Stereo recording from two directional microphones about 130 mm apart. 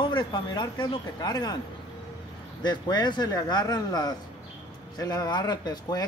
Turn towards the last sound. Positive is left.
turn(degrees=30)  # may be behind; listen again after turning